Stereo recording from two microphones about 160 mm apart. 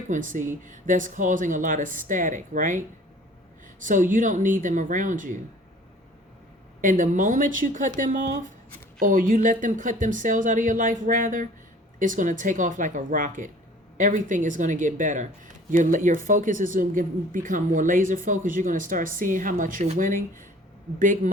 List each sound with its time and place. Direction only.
0.1 s speech: 55° right (ahead or behind)
3.8 s speech: 55° right (ahead or behind)
6.8 s speech: 55° right (ahead or behind)